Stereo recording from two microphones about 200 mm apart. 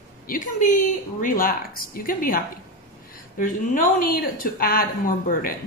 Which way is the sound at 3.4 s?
40° left (ahead or behind).